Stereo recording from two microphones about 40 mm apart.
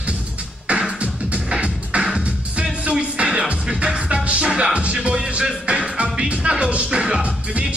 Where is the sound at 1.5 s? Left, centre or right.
Right.